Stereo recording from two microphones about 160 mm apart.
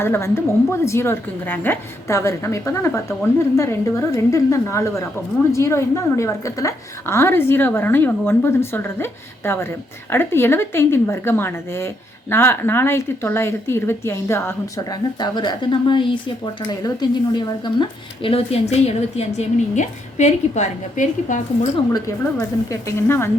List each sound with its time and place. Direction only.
0.0 s a woman's voice: 15° left (ahead or behind); by 21.7 s 50° left (ahead or behind)
21.9 s a woman's voice: 20° left (ahead or behind)